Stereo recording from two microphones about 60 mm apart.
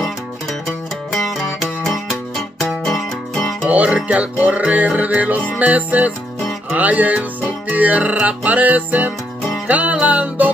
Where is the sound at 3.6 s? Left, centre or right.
Right.